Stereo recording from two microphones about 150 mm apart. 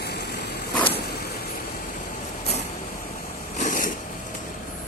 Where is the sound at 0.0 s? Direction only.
90° left.